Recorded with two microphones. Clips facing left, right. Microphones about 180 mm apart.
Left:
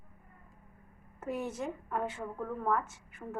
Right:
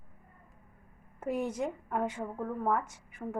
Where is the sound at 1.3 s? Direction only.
15° right (ahead or behind).